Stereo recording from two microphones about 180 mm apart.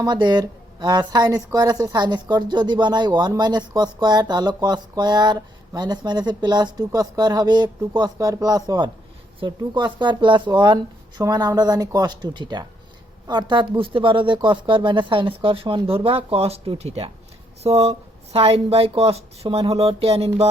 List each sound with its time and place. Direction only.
0.0 s speech: 25° right (ahead or behind)